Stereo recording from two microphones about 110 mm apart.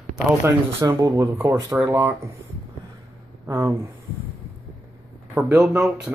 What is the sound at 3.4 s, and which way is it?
Speech, 25° right (ahead or behind).